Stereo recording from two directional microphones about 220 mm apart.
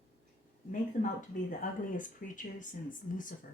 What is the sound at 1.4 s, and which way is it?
A woman's voice, 35° left (ahead or behind).